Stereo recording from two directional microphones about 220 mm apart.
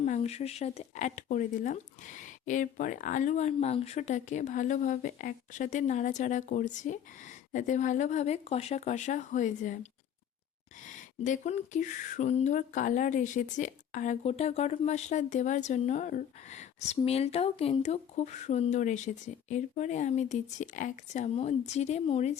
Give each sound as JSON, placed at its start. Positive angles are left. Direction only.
{"t": 0.0, "sound": "speech", "side_deg": 30}
{"t": 10.8, "sound": "speech", "side_deg": 35}